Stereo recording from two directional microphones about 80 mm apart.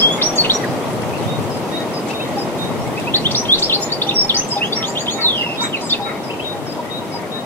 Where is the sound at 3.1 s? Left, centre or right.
Left.